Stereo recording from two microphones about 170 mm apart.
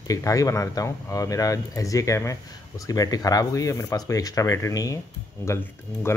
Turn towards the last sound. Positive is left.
turn(degrees=15)  # may be behind; listen again after turning